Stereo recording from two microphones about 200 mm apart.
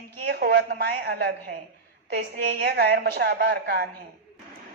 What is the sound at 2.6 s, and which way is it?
A woman's voice, 55° right (ahead or behind).